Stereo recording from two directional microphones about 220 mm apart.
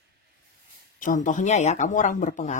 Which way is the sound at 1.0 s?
35° left (ahead or behind).